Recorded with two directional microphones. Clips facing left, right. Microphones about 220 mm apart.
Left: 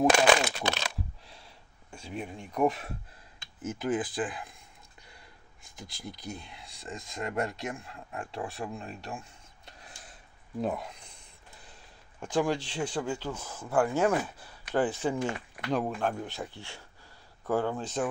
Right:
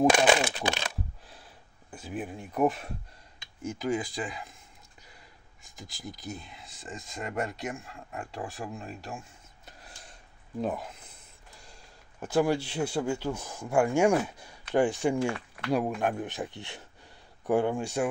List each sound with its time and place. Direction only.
0.1 s a sound: 5° right (ahead or behind)
0.4 s coin: 15° right (ahead or behind)
3.6 s speech: centre (ahead or behind)
5.6 s speech: centre (ahead or behind)
9.7 s a sound: centre (ahead or behind)
12.2 s speech: 10° right (ahead or behind)
15.2 s speech: 15° left (ahead or behind)
15.7 s speech: 10° right (ahead or behind)